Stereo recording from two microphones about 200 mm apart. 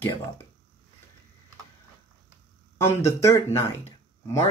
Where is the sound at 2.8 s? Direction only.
15° left (ahead or behind).